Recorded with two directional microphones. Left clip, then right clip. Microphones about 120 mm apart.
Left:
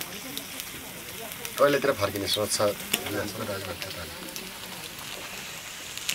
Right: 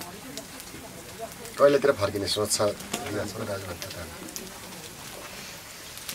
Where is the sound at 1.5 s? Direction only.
5° right (ahead or behind).